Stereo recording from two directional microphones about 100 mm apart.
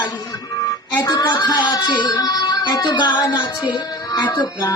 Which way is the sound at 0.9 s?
40° left (ahead or behind).